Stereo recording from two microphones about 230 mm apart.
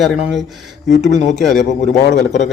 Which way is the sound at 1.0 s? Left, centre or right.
Left.